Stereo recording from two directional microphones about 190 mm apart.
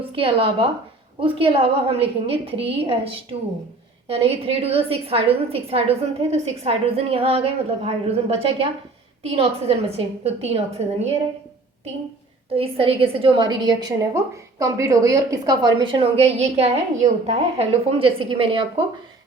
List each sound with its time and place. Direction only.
0.2 s a woman's voice: 30° right (ahead or behind)
4.1 s a woman's voice: 30° right (ahead or behind)
12.5 s a woman's voice: 30° right (ahead or behind)